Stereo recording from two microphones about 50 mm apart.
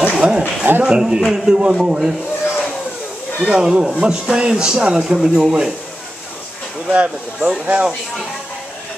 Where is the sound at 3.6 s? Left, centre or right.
Centre.